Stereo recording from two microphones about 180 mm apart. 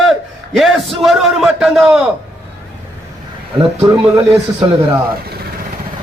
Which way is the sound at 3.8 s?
15° right (ahead or behind).